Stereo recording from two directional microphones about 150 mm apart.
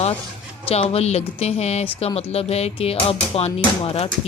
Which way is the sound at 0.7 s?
45° left (ahead or behind).